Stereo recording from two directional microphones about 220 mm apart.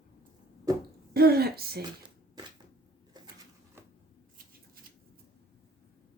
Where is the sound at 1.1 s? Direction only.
45° right (ahead or behind).